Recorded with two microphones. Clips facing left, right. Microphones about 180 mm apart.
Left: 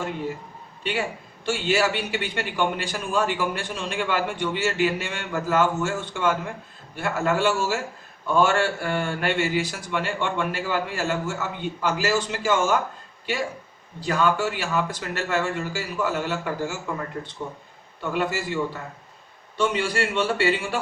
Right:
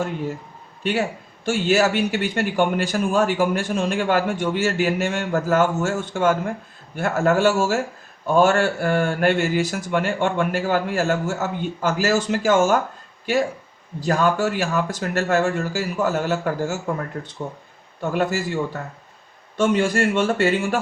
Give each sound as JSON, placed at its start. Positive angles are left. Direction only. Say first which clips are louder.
{"t": 0.8, "sound": "a man's voice", "louder": "right 5 dB", "side_deg": -45}
{"t": 14.0, "sound": "a man's voice", "louder": "right 3 dB", "side_deg": -45}
{"t": 18.0, "sound": "a man's voice", "louder": "right 4 dB", "side_deg": -45}